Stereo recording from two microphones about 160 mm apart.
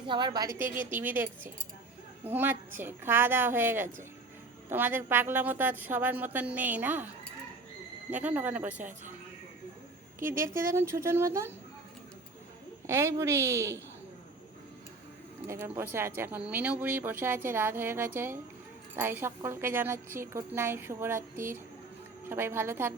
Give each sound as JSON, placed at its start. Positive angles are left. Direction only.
{"t": 0.0, "sound": "a woman's voice", "side_deg": -30}
{"t": 0.6, "sound": "speech", "side_deg": -10}
{"t": 8.1, "sound": "speech", "side_deg": -10}
{"t": 10.2, "sound": "speech", "side_deg": -15}
{"t": 12.9, "sound": "speech", "side_deg": -15}
{"t": 15.4, "sound": "speech", "side_deg": -15}